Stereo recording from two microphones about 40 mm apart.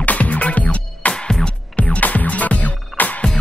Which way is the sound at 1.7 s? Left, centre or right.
Left.